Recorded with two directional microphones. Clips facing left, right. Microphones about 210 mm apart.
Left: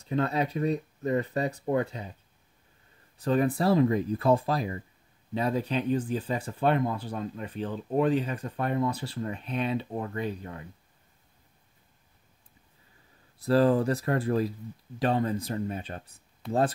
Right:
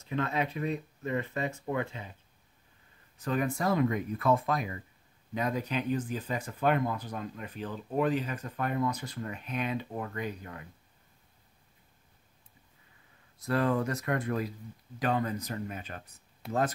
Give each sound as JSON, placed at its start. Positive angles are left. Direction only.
{"t": 0.0, "sound": "speech", "side_deg": 35}
{"t": 3.2, "sound": "speech", "side_deg": 35}
{"t": 13.4, "sound": "speech", "side_deg": 30}